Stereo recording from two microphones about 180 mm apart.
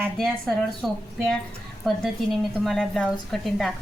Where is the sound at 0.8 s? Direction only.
Centre (ahead or behind).